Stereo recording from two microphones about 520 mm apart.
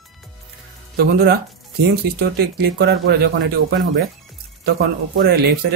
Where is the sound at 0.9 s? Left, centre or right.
Centre.